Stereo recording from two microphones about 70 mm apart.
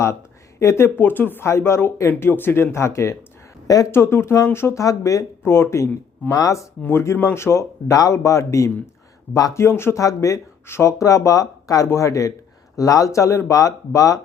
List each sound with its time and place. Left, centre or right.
0.6 s speech: left
0.9 s speech: left
1.5 s speech: left
4.8 s speech: left
5.4 s speech: left
6.3 s speech: left
7.0 s speech: left
10.0 s speech: left